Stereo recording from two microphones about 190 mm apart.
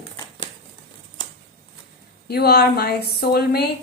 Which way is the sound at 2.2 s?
55° left (ahead or behind).